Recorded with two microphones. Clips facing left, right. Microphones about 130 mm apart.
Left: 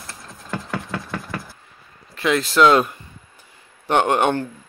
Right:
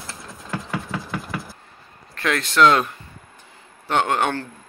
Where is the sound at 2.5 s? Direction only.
10° left (ahead or behind).